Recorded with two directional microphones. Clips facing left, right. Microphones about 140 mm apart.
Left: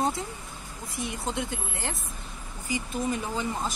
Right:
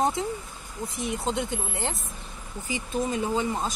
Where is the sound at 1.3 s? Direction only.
20° right (ahead or behind).